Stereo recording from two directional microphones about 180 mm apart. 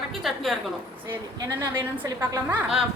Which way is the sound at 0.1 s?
Centre (ahead or behind).